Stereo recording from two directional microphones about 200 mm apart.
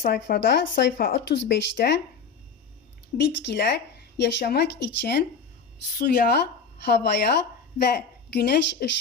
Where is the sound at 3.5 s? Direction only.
60° left (ahead or behind).